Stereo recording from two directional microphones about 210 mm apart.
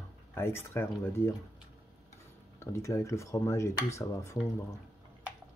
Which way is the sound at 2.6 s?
15° left (ahead or behind).